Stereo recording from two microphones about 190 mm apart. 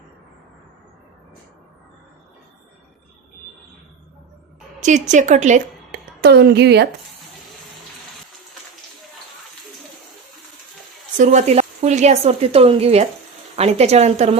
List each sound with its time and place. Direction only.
4.8 s a woman's voice: 40° right (ahead or behind)
5.9 s a woman's voice: 60° right (ahead or behind)
11.2 s a woman's voice: 40° right (ahead or behind)